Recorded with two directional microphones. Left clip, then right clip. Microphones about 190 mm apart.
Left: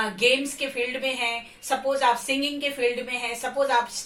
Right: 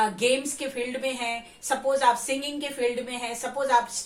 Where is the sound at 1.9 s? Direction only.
15° right (ahead or behind).